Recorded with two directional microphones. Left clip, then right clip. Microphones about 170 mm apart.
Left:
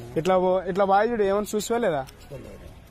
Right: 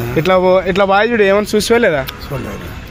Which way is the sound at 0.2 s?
60° left (ahead or behind).